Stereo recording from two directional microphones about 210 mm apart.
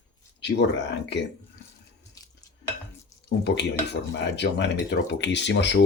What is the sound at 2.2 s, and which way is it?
Stir, 15° left (ahead or behind).